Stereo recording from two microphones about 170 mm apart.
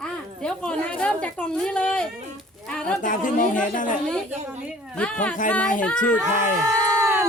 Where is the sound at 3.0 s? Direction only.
50° left (ahead or behind).